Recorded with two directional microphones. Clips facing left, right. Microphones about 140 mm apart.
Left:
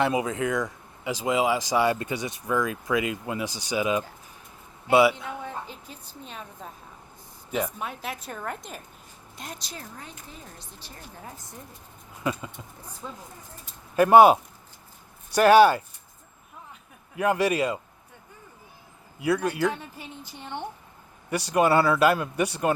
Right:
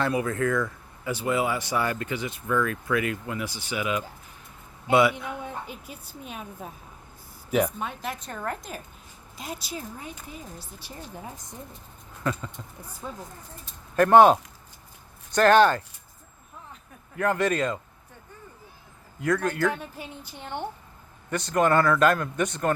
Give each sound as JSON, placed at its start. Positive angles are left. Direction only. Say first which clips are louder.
{"t": 0.0, "sound": "speech", "louder": "left 1 dB", "side_deg": 15}
{"t": 4.9, "sound": "speech", "louder": "left 1 dB", "side_deg": 10}
{"t": 5.5, "sound": "speech", "louder": "even", "side_deg": -15}
{"t": 7.5, "sound": "a woman's voice", "louder": "right 4 dB", "side_deg": 0}
{"t": 12.2, "sound": "speech", "louder": "even", "side_deg": 10}
{"t": 13.0, "sound": "speech", "louder": "right 2 dB", "side_deg": -10}
{"t": 13.9, "sound": "speech", "louder": "left 1 dB", "side_deg": 5}
{"t": 17.2, "sound": "speech", "louder": "left 1 dB", "side_deg": 10}
{"t": 19.2, "sound": "speech", "louder": "even", "side_deg": 10}
{"t": 19.7, "sound": "speech", "louder": "right 2 dB", "side_deg": -15}
{"t": 21.2, "sound": "speech", "louder": "left 1 dB", "side_deg": 10}